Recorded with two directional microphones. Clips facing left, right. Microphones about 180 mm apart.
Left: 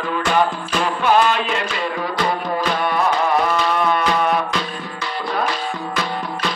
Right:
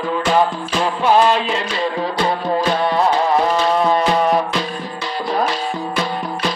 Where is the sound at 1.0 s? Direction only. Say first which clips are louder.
Right 3 dB; 30° right (ahead or behind).